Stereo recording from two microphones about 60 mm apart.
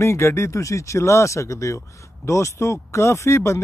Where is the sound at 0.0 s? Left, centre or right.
Left.